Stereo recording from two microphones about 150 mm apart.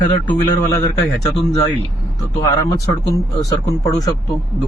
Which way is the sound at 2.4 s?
20° left (ahead or behind).